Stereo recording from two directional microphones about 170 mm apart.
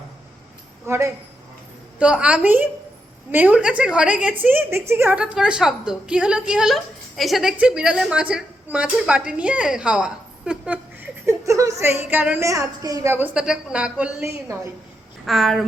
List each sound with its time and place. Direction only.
0.9 s a woman's voice: 15° right (ahead or behind)
11.3 s a woman's voice: 20° right (ahead or behind)
15.3 s a woman's voice: centre (ahead or behind)